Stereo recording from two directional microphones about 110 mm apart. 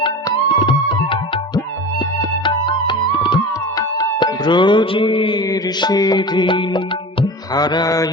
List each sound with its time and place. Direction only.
0.0 s music: 45° left (ahead or behind)
3.8 s music: 35° left (ahead or behind)
7.5 s mantra: 40° left (ahead or behind)